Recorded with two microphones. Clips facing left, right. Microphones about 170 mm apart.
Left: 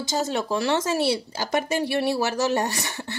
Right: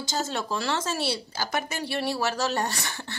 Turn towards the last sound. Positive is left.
turn(degrees=15)  # may be behind; listen again after turning